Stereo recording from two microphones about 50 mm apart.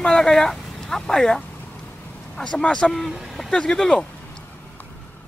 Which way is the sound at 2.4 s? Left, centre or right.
Centre.